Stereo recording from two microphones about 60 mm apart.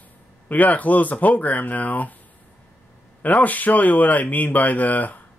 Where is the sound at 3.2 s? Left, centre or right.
Left.